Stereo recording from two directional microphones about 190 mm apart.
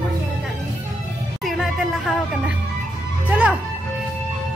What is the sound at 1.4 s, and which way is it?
Music, centre (ahead or behind).